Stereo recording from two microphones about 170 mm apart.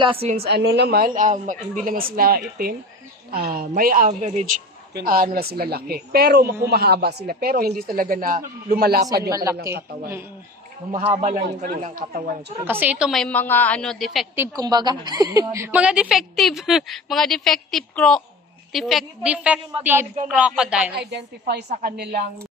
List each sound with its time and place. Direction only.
0.0 s a woman's voice: 30° right (ahead or behind)
0.5 s a woman's voice: 85° right; by 4.6 s 45° right (ahead or behind)
4.9 s speech: 60° right (ahead or behind)
9.3 s speech: 20° right (ahead or behind)
11.3 s speech: 55° right (ahead or behind)
12.6 s a woman's voice: 10° right (ahead or behind)
14.6 s a woman's voice: 25° right (ahead or behind); by 20.9 s 5° right (ahead or behind)
20.9 s a woman's voice: 75° right (ahead or behind)
21.8 s speech: 65° right (ahead or behind)